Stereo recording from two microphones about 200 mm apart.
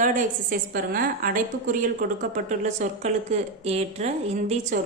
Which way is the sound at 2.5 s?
35° right (ahead or behind).